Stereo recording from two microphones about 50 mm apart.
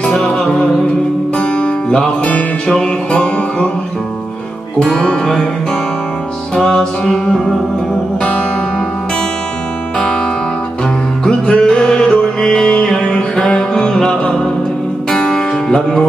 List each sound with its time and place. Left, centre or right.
0.0 s music: centre
1.4 s music: centre
5.0 s music: centre
6.5 s music: centre
11.2 s music: centre